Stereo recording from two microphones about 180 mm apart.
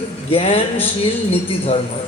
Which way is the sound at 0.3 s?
30° left (ahead or behind).